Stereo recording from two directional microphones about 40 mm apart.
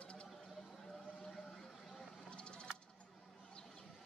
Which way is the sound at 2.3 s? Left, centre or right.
Left.